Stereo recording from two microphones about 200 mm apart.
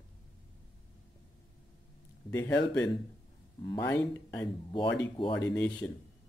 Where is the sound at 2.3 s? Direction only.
15° left (ahead or behind).